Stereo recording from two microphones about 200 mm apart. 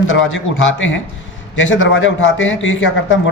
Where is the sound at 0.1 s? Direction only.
75° left (ahead or behind).